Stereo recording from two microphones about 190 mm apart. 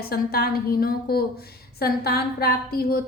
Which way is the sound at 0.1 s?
55° left (ahead or behind).